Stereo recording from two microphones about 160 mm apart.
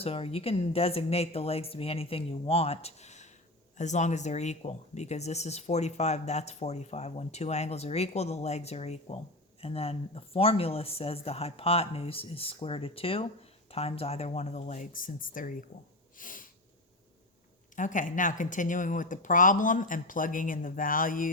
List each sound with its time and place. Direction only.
0.0 s speech: 40° left (ahead or behind); by 15.6 s 55° left (ahead or behind)
16.1 s sneeze: 60° left (ahead or behind)
17.7 s speech: 55° left (ahead or behind)